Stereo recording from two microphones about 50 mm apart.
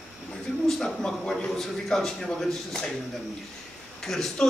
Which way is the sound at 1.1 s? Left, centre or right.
Centre.